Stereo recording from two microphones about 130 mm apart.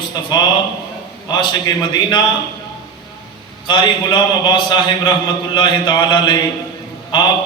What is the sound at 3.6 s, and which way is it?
A man's voice, 40° left (ahead or behind).